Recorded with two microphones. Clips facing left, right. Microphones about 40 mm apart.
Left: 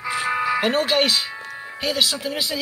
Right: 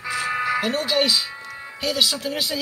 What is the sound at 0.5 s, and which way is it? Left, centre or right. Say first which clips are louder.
Speech: left 4 dB; left.